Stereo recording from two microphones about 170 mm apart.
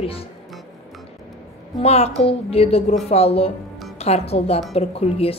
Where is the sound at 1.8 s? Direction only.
40° left (ahead or behind).